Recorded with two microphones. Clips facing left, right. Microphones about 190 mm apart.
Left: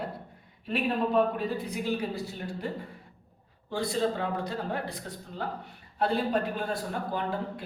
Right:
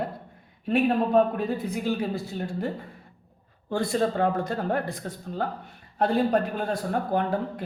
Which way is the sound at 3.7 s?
50° right (ahead or behind).